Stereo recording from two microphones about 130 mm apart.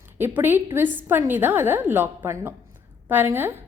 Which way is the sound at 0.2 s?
15° right (ahead or behind).